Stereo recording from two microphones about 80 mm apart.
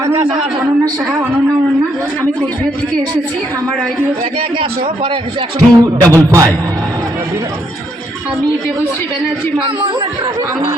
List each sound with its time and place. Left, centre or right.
5.5 s speech: right